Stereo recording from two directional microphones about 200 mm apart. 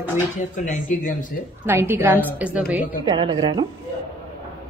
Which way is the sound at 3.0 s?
20° right (ahead or behind).